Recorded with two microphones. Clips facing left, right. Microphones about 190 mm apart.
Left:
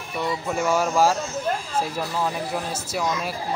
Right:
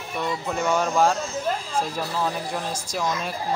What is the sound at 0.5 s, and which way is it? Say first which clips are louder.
Speech: left 1 dB; 5° left (ahead or behind).